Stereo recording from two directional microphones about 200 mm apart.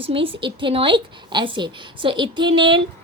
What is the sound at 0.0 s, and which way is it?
A woman's voice, 25° right (ahead or behind).